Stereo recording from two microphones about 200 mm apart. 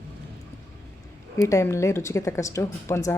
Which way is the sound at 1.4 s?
15° left (ahead or behind).